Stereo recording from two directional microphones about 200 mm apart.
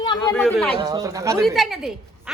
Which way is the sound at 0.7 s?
15° right (ahead or behind).